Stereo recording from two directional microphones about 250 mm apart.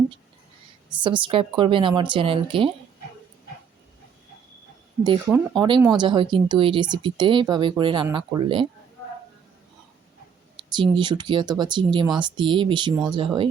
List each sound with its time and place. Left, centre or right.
0.9 s speech: centre
5.5 s speech: centre
10.6 s speech: centre